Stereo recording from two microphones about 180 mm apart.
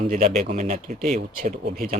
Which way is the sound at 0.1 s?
45° right (ahead or behind).